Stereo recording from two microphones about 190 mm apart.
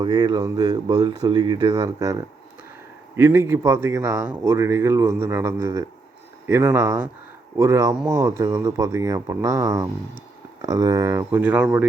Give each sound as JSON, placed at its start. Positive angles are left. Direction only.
{"t": 0.0, "sound": "speech", "side_deg": -20}